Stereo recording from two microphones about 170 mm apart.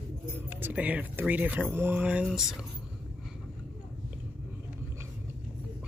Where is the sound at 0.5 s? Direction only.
10° right (ahead or behind).